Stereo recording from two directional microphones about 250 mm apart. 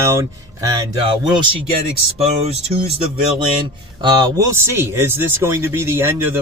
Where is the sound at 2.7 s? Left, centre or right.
Right.